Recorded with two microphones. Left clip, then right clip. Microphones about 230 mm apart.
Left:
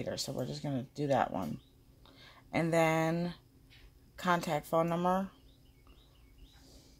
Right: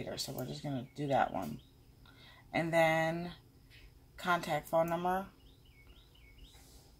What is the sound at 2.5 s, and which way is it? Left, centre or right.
Speech, left.